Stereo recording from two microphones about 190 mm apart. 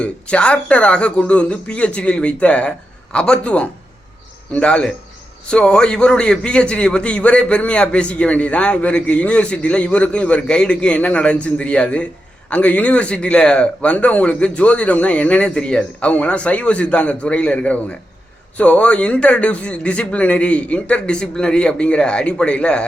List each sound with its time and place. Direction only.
0.0 s a man's voice: 5° left (ahead or behind)